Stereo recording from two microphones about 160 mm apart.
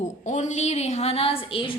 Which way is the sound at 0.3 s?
50° left (ahead or behind).